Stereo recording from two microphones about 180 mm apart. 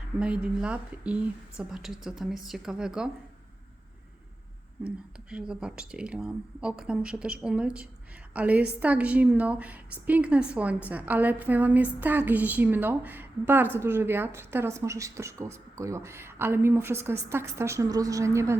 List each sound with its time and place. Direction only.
0.2 s speech: 5° right (ahead or behind)
4.8 s a woman's voice: 5° right (ahead or behind)